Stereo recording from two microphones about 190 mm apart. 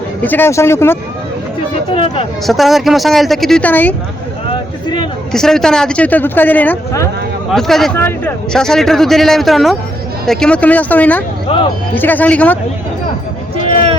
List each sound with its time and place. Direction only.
0.2 s speech: 10° left (ahead or behind)
1.9 s speech: 30° left (ahead or behind)
2.5 s speech: centre (ahead or behind)
5.3 s speech: centre (ahead or behind)
7.5 s speech: centre (ahead or behind)
11.4 s speech: 25° left (ahead or behind)
11.9 s speech: 10° left (ahead or behind)